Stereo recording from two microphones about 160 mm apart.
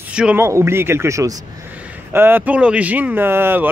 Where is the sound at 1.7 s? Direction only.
10° right (ahead or behind).